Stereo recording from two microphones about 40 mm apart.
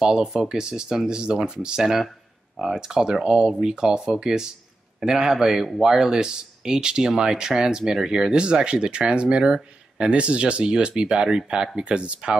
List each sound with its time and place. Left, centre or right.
0.0 s speech: centre